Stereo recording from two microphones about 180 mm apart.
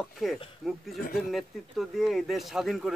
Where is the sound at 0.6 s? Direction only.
Centre (ahead or behind).